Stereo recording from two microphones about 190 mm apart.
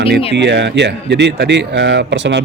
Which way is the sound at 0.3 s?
65° right (ahead or behind).